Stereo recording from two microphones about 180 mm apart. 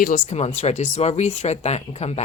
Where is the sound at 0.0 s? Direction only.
40° left (ahead or behind).